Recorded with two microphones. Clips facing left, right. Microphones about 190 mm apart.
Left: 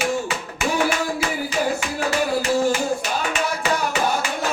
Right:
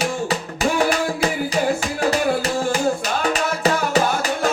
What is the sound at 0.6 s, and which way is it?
Music, 35° right (ahead or behind).